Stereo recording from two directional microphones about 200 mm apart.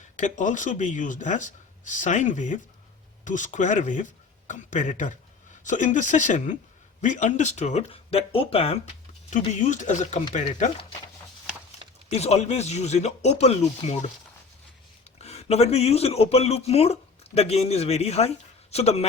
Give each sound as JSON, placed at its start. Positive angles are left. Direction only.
{"t": 0.2, "sound": "speech", "side_deg": 40}
{"t": 12.1, "sound": "speech", "side_deg": 30}
{"t": 15.2, "sound": "speech", "side_deg": 30}